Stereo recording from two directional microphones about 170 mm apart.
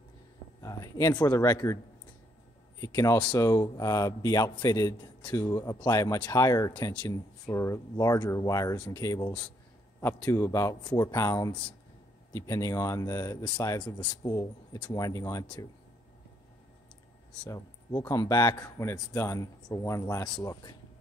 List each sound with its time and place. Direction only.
0.6 s speech: 20° left (ahead or behind)
2.8 s speech: 20° left (ahead or behind)
17.5 s speech: 20° left (ahead or behind)